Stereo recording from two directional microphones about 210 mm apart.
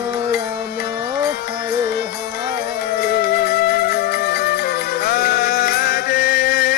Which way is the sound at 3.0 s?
50° left (ahead or behind).